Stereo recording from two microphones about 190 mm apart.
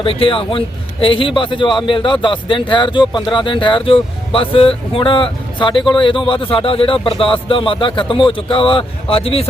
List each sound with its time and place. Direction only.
0.0 s a man's voice: 30° left (ahead or behind)